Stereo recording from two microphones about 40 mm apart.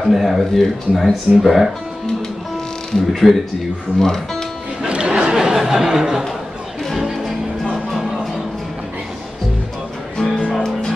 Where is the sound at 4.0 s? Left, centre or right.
Centre.